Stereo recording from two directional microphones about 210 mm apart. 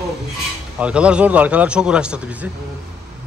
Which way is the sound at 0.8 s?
5° right (ahead or behind).